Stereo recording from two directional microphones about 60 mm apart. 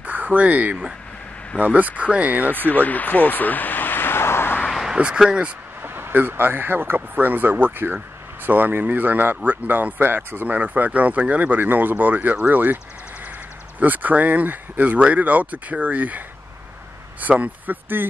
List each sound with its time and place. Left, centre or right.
0.0 s speech: right
2.7 s vehicle: left
4.6 s a sound: centre
4.9 s speech: centre
5.8 s speech: right
13.7 s speech: right